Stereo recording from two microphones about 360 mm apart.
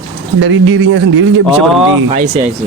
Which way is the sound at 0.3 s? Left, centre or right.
Right.